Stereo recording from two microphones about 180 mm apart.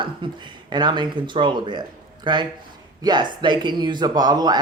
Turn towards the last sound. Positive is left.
turn(degrees=-20)  # may be behind; listen again after turning